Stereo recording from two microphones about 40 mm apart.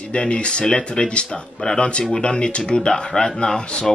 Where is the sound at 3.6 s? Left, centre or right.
Left.